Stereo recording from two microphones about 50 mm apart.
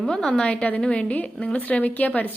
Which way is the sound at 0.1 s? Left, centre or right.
Centre.